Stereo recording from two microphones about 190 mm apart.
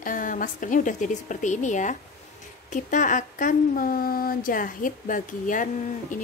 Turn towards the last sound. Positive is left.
turn(degrees=45)  # may be behind; listen again after turning